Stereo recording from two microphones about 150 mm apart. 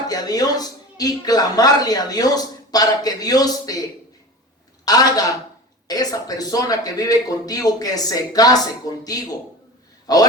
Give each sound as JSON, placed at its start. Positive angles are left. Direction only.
{"t": 0.1, "sound": "speech", "side_deg": 25}
{"t": 4.9, "sound": "speech", "side_deg": 25}
{"t": 10.1, "sound": "speech", "side_deg": 25}